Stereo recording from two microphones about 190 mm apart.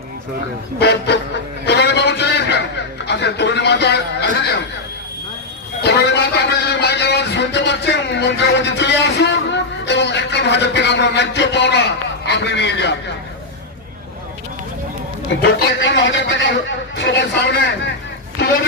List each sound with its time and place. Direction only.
0.8 s a man's voice: 60° left (ahead or behind)
1.6 s a sound: 60° left (ahead or behind)
3.1 s a man's voice: 65° left (ahead or behind)
5.8 s a man's voice: 60° left (ahead or behind)
15.4 s a man's voice: 60° left (ahead or behind)